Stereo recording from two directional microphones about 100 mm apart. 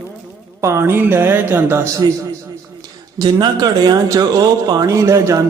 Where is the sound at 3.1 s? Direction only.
45° right (ahead or behind).